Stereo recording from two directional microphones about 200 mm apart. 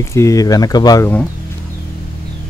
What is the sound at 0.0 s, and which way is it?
Speech, 15° left (ahead or behind).